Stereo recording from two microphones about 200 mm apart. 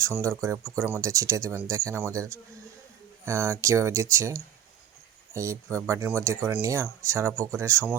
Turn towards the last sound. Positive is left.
turn(degrees=-15)  # may be behind; listen again after turning